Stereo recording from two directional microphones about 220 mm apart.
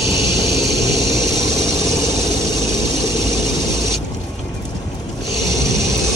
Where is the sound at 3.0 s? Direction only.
20° left (ahead or behind).